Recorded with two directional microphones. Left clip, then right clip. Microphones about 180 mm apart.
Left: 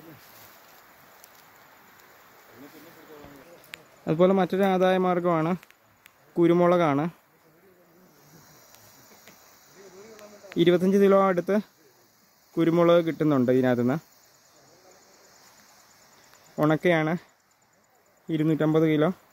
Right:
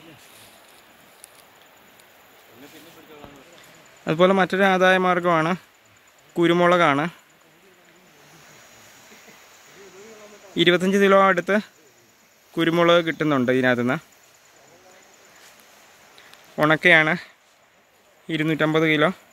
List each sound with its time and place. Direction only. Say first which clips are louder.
4.0 s speech: right 4 dB; 5° left (ahead or behind)
10.5 s speech: right 3 dB; 10° left (ahead or behind)
16.5 s speech: right 7 dB; 10° left (ahead or behind)
18.3 s speech: right 3 dB; 15° left (ahead or behind)